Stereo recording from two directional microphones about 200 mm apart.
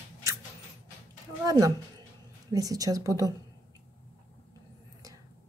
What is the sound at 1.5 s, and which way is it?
A woman's voice, 15° right (ahead or behind).